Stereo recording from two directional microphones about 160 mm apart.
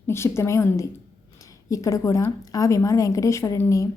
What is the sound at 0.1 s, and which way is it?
A woman's voice, 15° left (ahead or behind).